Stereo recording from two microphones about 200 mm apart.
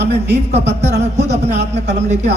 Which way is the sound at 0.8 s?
35° right (ahead or behind).